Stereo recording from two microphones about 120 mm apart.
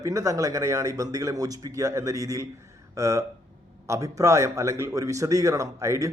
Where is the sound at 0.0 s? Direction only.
25° right (ahead or behind).